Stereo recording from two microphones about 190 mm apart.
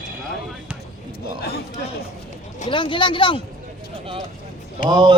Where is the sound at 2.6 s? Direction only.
25° left (ahead or behind).